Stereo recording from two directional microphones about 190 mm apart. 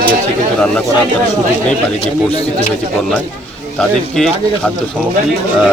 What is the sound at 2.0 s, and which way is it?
Speech, 30° left (ahead or behind).